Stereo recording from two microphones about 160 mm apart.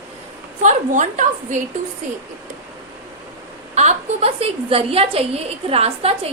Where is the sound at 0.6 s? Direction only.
50° right (ahead or behind).